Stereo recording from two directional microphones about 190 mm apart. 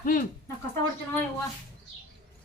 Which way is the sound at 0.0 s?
50° left (ahead or behind).